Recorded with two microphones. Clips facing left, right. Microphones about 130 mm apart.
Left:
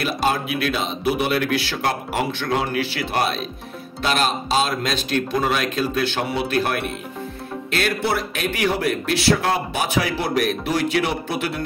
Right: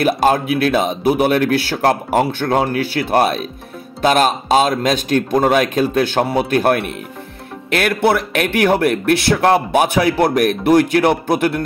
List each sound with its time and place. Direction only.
0.0 s speech: 50° right (ahead or behind)